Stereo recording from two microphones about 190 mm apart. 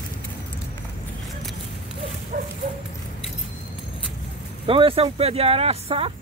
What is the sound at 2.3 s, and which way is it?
Dog, 50° right (ahead or behind).